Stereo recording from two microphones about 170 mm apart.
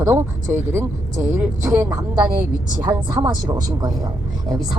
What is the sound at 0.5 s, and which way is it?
Speech, 15° right (ahead or behind).